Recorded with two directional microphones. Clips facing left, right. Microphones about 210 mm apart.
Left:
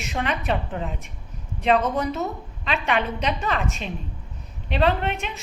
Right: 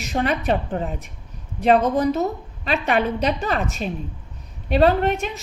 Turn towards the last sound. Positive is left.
turn(degrees=-40)  # may be behind; listen again after turning